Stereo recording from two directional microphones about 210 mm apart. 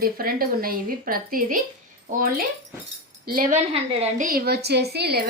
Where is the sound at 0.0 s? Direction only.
45° right (ahead or behind).